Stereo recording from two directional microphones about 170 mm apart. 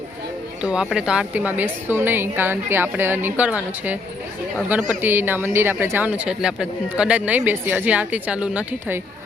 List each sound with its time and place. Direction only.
0.6 s a man's voice: 5° right (ahead or behind)